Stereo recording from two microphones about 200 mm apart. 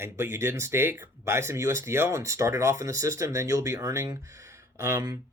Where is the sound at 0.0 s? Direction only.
10° right (ahead or behind).